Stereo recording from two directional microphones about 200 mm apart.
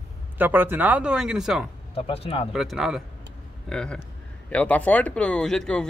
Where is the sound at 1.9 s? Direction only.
30° left (ahead or behind).